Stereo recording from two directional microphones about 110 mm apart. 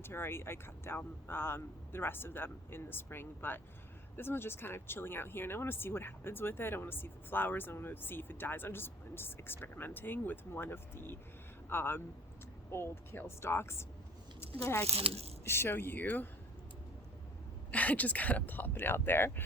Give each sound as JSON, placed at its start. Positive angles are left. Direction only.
{"t": 0.0, "sound": "speech", "side_deg": 20}
{"t": 14.8, "sound": "speech", "side_deg": -65}
{"t": 15.4, "sound": "speech", "side_deg": 20}
{"t": 17.7, "sound": "speech", "side_deg": 15}